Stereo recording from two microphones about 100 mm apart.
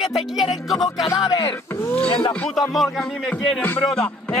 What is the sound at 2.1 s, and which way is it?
Speech, 60° left (ahead or behind).